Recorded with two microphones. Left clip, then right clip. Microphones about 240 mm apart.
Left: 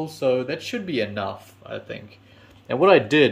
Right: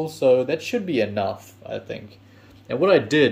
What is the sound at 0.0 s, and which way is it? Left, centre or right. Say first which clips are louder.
Speech: right 4 dB; centre.